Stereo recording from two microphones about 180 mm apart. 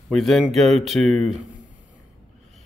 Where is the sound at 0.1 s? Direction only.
Centre (ahead or behind).